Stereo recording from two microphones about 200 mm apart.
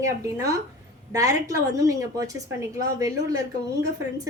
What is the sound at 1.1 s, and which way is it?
A woman's voice, 15° right (ahead or behind).